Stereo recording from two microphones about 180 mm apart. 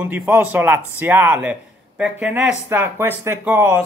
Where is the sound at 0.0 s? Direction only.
10° right (ahead or behind).